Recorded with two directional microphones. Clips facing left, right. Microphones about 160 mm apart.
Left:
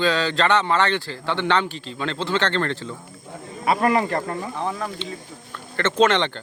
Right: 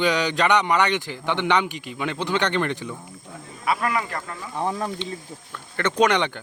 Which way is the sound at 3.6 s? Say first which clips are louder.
Left 5 dB; 30° left (ahead or behind).